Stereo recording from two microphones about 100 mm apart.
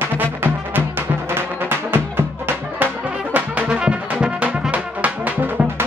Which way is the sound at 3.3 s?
15° right (ahead or behind).